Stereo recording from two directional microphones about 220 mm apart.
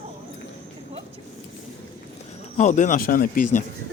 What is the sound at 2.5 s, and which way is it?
Speech, 35° left (ahead or behind).